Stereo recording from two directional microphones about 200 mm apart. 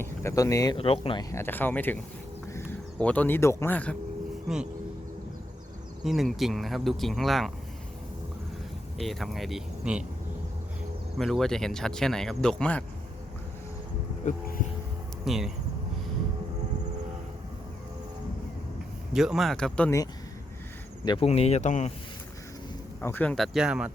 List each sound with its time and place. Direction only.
0.0 s speech: 15° left (ahead or behind)
0.8 s speech: 30° left (ahead or behind)
1.3 s speech: 10° left (ahead or behind)
4.4 s speech: 5° right (ahead or behind)
6.0 s speech: centre (ahead or behind)
9.0 s speech: centre (ahead or behind)
11.2 s speech: centre (ahead or behind)
14.3 s speech: 40° left (ahead or behind)
15.2 s speech: centre (ahead or behind)
19.1 s speech: centre (ahead or behind)
21.0 s speech: 20° left (ahead or behind)
21.2 s speech: 30° left (ahead or behind)
23.0 s speech: 10° left (ahead or behind)